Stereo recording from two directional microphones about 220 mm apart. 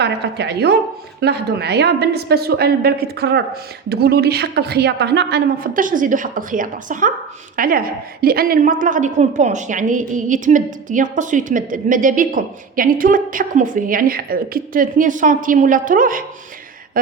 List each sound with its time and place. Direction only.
0.0 s a woman's voice: 50° right (ahead or behind)